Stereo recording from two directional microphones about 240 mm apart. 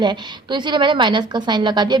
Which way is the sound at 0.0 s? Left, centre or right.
Centre.